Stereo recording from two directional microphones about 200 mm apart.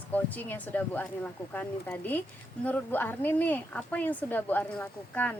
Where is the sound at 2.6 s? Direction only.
10° left (ahead or behind).